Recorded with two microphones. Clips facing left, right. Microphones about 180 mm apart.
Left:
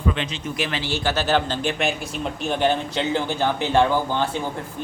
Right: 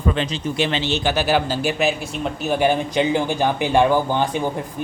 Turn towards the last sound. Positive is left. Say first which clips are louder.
# right 3 dB
turn(degrees=-15)  # may be behind; listen again after turning